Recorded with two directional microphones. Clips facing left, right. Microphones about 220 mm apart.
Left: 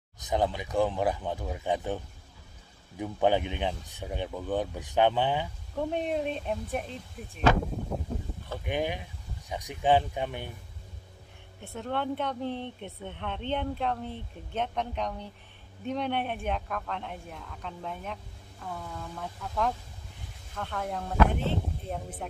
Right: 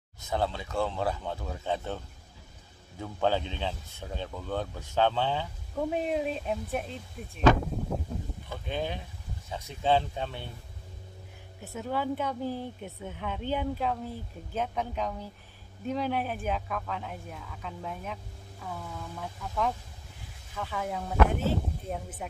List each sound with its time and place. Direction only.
0.2 s speech: 15° left (ahead or behind)
5.8 s speech: 5° right (ahead or behind)
8.6 s speech: 15° left (ahead or behind)
11.6 s speech: 5° right (ahead or behind)